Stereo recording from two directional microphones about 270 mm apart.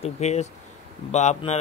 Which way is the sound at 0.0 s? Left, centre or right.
Left.